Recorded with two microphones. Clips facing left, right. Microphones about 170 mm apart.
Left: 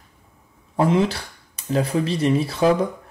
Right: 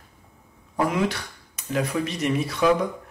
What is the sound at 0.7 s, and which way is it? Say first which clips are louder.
Speech: left 4 dB; 30° left (ahead or behind).